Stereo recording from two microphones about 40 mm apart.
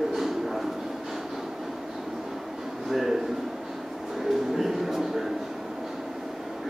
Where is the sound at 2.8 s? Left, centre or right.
Centre.